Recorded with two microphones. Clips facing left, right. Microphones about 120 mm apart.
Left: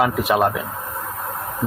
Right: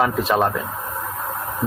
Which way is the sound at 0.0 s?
5° left (ahead or behind).